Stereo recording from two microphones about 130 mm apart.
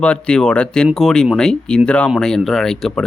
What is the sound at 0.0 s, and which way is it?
Speech, 10° left (ahead or behind).